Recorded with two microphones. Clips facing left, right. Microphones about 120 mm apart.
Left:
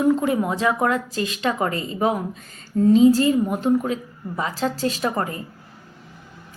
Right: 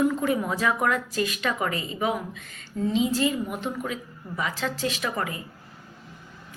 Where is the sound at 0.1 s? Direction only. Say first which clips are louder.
Left 5 dB; 25° left (ahead or behind).